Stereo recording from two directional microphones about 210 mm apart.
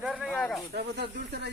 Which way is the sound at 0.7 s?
50° right (ahead or behind).